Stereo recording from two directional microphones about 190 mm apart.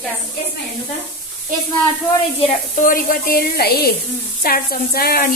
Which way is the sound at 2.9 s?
50° left (ahead or behind).